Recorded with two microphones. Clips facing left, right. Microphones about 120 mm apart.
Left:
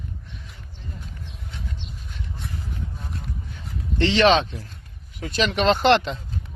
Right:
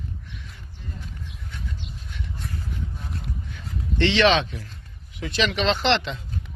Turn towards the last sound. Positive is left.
turn(degrees=45)  # may be behind; listen again after turning